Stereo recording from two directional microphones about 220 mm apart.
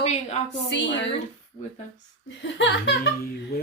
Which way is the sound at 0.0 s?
30° left (ahead or behind).